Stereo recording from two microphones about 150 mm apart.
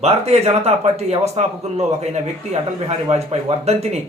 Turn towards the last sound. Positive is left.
turn(degrees=-45)  # may be behind; listen again after turning